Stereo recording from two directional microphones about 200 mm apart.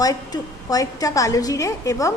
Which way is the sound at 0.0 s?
20° left (ahead or behind).